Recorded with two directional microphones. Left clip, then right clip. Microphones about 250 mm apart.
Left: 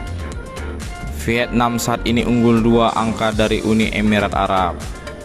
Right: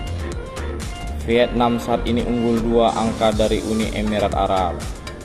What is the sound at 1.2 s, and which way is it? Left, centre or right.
Speech, left.